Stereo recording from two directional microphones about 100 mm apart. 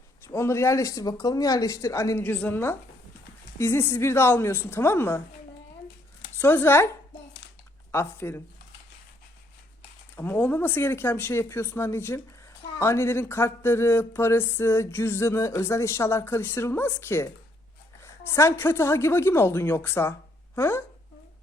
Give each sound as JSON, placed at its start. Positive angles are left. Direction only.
{"t": 0.3, "sound": "speech", "side_deg": 25}
{"t": 2.1, "sound": "speech", "side_deg": 20}
{"t": 6.4, "sound": "speech", "side_deg": 20}
{"t": 7.9, "sound": "speech", "side_deg": 25}
{"t": 10.2, "sound": "speech", "side_deg": 15}